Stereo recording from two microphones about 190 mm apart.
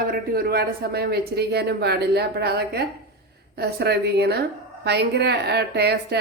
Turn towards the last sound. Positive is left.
turn(degrees=-60)  # may be behind; listen again after turning